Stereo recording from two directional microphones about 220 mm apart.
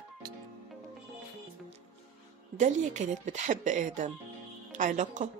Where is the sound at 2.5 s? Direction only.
35° right (ahead or behind).